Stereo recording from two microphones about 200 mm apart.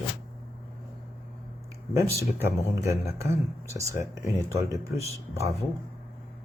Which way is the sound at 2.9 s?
15° right (ahead or behind).